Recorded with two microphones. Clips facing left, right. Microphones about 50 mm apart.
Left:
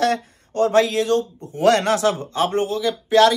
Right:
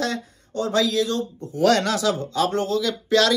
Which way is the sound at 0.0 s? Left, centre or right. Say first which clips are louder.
Left 6 dB; left.